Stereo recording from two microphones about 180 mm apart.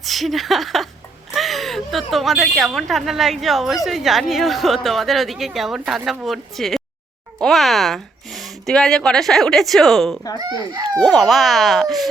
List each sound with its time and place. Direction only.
0.0 s speech: centre (ahead or behind)
10.3 s speech: 20° right (ahead or behind)
11.0 s speech: centre (ahead or behind)